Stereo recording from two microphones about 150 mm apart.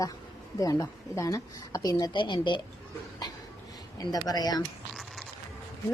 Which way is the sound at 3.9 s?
25° left (ahead or behind).